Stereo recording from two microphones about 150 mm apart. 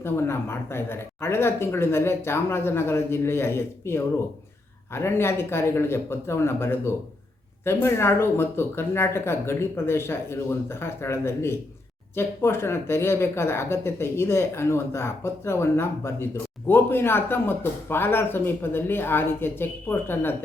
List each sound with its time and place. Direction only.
0.0 s speech: 15° left (ahead or behind)